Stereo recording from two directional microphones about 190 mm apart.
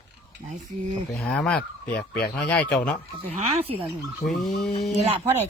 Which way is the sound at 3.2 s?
30° right (ahead or behind).